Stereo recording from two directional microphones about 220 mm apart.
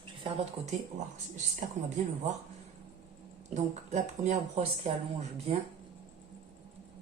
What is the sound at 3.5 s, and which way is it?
Speech, 30° right (ahead or behind).